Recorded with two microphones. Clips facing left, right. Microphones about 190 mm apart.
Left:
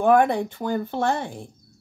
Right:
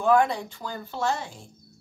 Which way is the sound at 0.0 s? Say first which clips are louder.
Left 4 dB; 55° left (ahead or behind).